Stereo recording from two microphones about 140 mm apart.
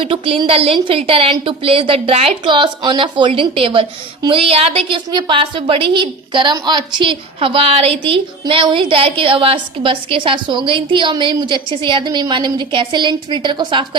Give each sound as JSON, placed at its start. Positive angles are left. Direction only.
{"t": 0.0, "sound": "a woman's voice", "side_deg": -40}